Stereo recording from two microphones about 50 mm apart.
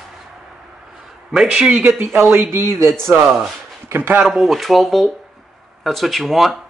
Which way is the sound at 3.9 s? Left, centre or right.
Right.